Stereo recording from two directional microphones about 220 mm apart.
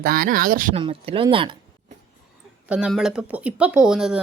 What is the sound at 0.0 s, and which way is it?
Speech, 40° right (ahead or behind).